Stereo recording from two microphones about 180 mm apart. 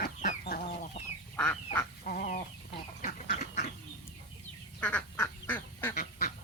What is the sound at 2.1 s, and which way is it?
Chicken, 55° left (ahead or behind).